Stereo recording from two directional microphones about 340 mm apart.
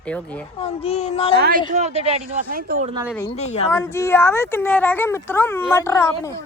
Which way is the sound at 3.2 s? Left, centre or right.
Centre.